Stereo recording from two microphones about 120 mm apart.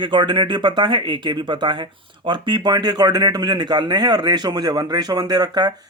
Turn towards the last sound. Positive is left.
turn(degrees=-35)  # may be behind; listen again after turning